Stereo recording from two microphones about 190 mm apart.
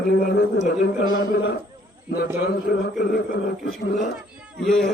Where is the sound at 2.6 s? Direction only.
60° left (ahead or behind).